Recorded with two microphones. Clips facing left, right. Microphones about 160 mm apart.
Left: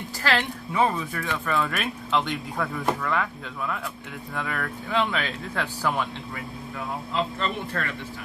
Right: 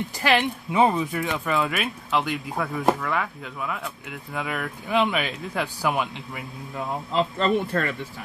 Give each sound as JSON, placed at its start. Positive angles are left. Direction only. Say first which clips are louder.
{"t": 0.2, "sound": "speech", "louder": "right 3 dB", "side_deg": -15}
{"t": 7.2, "sound": "speech", "louder": "right 6 dB", "side_deg": -35}